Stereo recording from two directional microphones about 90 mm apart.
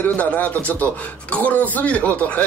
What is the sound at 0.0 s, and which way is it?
Speech, 20° left (ahead or behind).